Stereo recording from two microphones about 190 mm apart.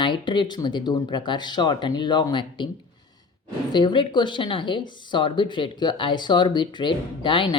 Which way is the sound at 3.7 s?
25° left (ahead or behind).